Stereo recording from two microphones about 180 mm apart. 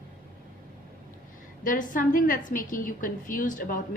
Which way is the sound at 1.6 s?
50° left (ahead or behind).